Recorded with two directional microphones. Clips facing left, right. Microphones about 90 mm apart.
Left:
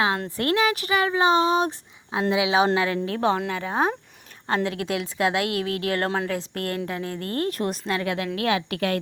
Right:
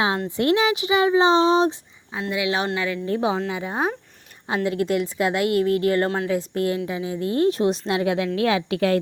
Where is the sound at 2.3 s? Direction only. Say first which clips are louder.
Left 3 dB; 20° left (ahead or behind).